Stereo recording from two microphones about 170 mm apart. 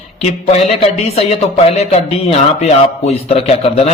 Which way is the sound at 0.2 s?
40° left (ahead or behind).